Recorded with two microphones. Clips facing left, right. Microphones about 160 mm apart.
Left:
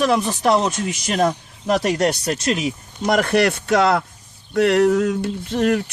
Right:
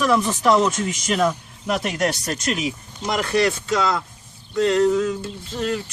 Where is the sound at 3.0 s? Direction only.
55° left (ahead or behind).